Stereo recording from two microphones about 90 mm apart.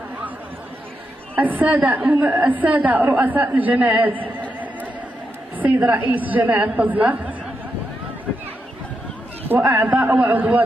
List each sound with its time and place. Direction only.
1.3 s a woman's voice: 20° right (ahead or behind)
5.6 s a woman's voice: 20° right (ahead or behind)
9.5 s a man's voice: 15° right (ahead or behind)